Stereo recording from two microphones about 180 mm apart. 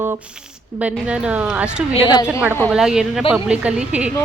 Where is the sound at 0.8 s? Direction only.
5° right (ahead or behind).